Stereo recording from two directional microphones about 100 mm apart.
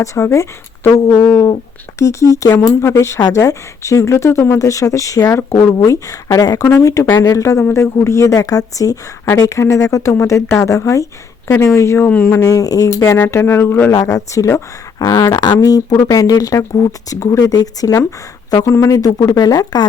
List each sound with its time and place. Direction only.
0.0 s speech: 30° left (ahead or behind)
1.2 s speech: 20° left (ahead or behind)
12.0 s speech: 15° left (ahead or behind)
12.5 s speech: 35° left (ahead or behind)
13.9 s speech: 35° left (ahead or behind)